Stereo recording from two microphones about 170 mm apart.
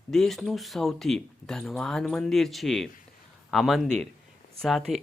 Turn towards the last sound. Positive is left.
turn(degrees=0)  # may be behind; listen again after turning